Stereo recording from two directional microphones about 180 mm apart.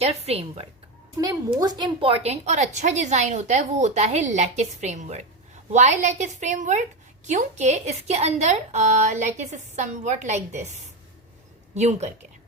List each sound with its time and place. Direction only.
0.0 s a woman's voice: 35° right (ahead or behind)
1.5 s a woman's voice: 25° right (ahead or behind); by 12.1 s 40° right (ahead or behind)